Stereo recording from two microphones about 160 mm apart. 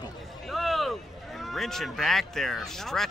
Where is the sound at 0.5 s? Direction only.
Centre (ahead or behind).